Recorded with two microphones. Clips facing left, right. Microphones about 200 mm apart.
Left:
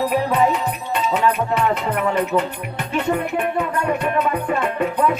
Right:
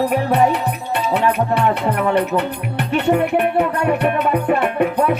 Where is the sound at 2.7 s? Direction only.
70° right (ahead or behind).